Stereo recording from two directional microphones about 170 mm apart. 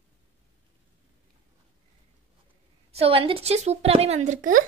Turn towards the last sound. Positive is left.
turn(degrees=-50)  # may be behind; listen again after turning